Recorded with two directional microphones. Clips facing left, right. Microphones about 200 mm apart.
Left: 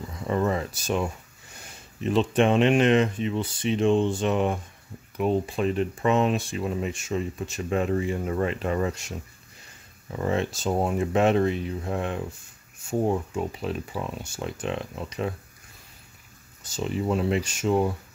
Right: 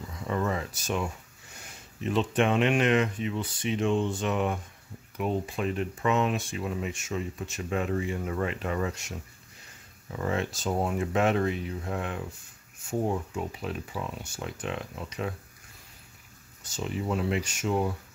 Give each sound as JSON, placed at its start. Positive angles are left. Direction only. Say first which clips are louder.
{"t": 0.3, "sound": "speech", "louder": "left 4 dB", "side_deg": 35}
{"t": 2.0, "sound": "speech", "louder": "left 4 dB", "side_deg": 30}
{"t": 10.1, "sound": "speech", "louder": "left 4 dB", "side_deg": 30}
{"t": 16.6, "sound": "speech", "louder": "left 5 dB", "side_deg": 30}